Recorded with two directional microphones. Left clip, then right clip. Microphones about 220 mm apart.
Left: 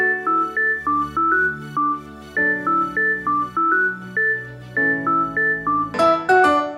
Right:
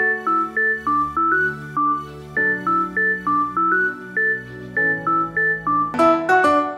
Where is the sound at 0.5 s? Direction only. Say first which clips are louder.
Even; centre (ahead or behind).